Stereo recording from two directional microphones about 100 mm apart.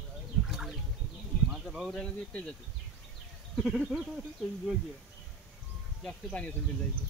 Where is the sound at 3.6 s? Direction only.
5° right (ahead or behind).